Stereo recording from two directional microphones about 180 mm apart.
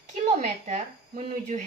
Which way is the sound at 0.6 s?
35° right (ahead or behind).